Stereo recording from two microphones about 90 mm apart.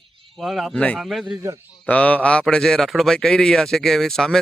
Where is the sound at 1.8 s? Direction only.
15° left (ahead or behind).